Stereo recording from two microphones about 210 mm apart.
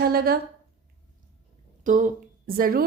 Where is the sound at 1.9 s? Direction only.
40° right (ahead or behind).